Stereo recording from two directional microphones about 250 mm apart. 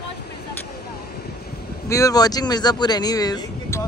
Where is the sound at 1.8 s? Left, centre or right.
Centre.